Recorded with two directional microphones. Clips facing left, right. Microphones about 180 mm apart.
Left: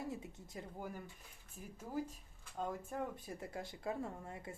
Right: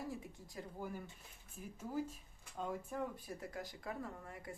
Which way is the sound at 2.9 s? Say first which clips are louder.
Even; 25° left (ahead or behind).